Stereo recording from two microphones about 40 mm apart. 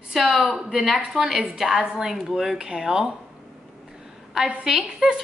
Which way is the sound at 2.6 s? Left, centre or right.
Right.